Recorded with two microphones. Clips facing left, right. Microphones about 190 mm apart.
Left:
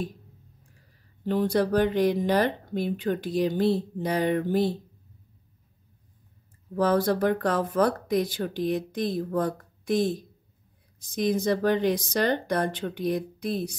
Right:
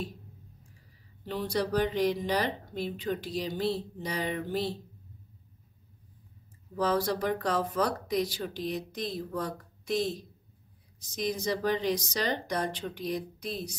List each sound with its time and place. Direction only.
1.2 s speech: 50° left (ahead or behind)
6.7 s speech: 55° left (ahead or behind)